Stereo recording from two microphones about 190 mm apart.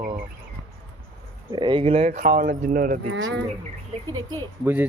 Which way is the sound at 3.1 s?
85° right.